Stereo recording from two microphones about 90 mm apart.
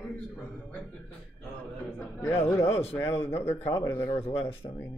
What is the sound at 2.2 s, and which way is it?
Speech, 25° left (ahead or behind).